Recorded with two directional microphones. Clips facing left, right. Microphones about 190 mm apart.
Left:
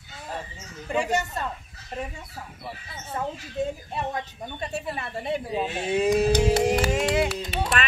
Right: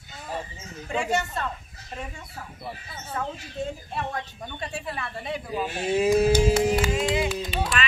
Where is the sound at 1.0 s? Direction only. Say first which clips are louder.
Even; 15° left (ahead or behind).